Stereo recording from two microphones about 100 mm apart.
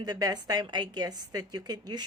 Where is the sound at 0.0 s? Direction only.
40° right (ahead or behind).